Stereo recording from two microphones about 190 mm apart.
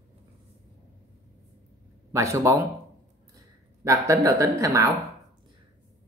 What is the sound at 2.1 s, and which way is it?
Speech, 15° right (ahead or behind).